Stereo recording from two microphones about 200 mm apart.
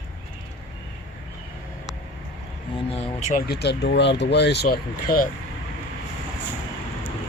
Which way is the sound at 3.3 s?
50° left (ahead or behind).